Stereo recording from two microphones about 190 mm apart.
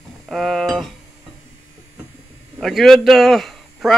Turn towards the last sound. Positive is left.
turn(degrees=0)  # may be behind; listen again after turning